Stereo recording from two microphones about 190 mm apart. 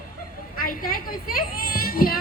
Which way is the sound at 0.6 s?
50° left (ahead or behind).